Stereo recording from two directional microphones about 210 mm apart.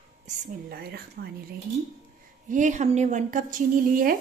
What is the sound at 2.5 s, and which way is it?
Speech, 35° right (ahead or behind).